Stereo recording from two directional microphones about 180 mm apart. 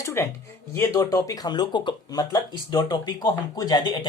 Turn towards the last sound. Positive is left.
turn(degrees=25)  # may be behind; listen again after turning